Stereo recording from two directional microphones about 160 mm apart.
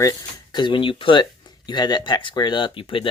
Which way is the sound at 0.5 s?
30° left (ahead or behind).